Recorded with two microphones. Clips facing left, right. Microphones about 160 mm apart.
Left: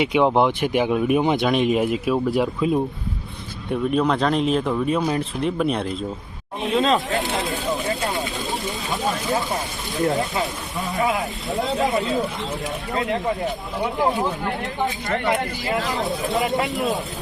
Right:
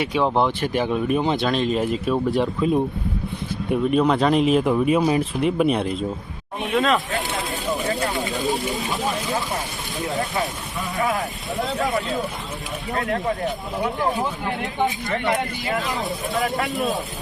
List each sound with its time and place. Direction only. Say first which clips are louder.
0.0 s speech: left 3 dB; 15° left (ahead or behind); by 6.0 s 5° right (ahead or behind)
6.7 s speech: left 1 dB; 25° left (ahead or behind)
10.2 s speech: left 1 dB; 20° left (ahead or behind)
11.8 s speech: left 3 dB; 20° left (ahead or behind)
13.2 s speech: even; centre (ahead or behind)
16.3 s speech: left 1 dB; 20° left (ahead or behind)